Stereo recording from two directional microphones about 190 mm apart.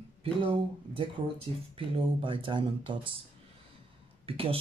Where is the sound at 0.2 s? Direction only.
30° right (ahead or behind).